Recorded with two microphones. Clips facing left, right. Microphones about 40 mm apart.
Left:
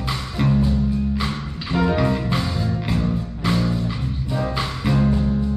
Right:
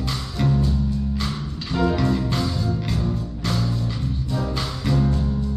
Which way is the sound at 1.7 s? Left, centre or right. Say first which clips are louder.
Left 1 dB; left.